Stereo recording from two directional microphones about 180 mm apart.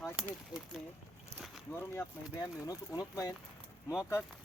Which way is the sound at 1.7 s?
15° left (ahead or behind).